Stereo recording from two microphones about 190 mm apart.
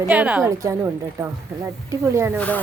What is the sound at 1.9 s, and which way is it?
Speech, 15° right (ahead or behind).